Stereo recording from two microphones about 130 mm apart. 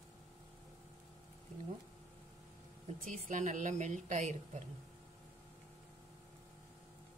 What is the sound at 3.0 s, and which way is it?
A woman's voice, 70° right (ahead or behind).